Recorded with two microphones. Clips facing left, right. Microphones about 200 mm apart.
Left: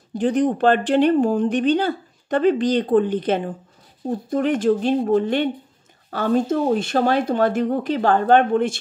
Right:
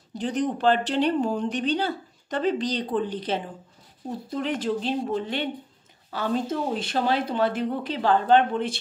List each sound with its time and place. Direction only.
0.1 s a woman's voice: 55° left (ahead or behind)